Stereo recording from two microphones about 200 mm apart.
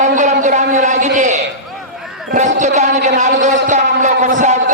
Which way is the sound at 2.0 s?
Centre (ahead or behind).